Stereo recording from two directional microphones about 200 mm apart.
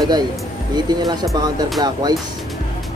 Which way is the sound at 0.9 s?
20° right (ahead or behind).